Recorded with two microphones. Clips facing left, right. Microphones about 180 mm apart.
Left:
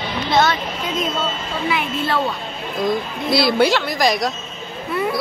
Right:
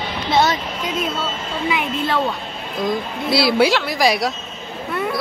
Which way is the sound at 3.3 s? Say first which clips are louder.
Even; 5° right (ahead or behind).